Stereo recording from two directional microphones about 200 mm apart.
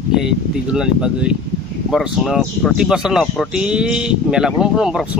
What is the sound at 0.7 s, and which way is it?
Speech, 5° right (ahead or behind).